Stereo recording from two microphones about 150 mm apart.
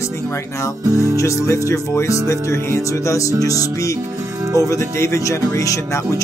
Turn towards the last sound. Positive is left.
turn(degrees=20)  # may be behind; listen again after turning